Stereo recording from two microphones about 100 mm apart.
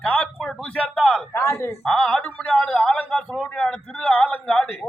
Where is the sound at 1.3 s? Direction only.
25° left (ahead or behind).